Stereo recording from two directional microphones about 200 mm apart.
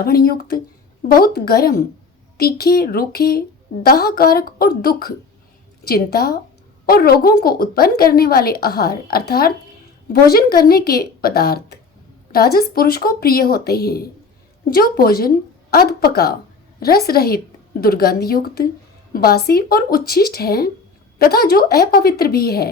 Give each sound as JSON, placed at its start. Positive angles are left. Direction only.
{"t": 0.0, "sound": "a woman's voice", "side_deg": 50}